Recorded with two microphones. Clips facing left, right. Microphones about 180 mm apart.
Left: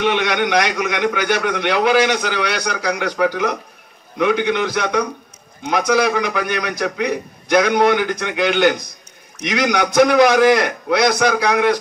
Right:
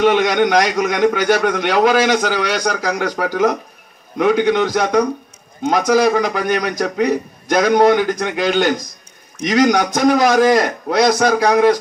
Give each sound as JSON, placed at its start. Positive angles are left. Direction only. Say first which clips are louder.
{"t": 0.0, "sound": "a man's voice", "louder": "right 5 dB", "side_deg": -45}